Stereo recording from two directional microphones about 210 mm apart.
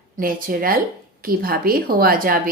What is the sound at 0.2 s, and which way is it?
A woman's voice, 40° right (ahead or behind).